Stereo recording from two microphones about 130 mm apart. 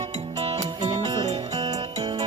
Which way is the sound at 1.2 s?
50° right (ahead or behind).